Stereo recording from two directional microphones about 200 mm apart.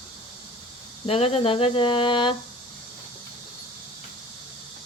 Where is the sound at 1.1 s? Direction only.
30° left (ahead or behind).